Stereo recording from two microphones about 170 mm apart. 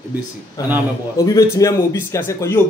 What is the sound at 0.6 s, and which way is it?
A man's voice, 20° left (ahead or behind).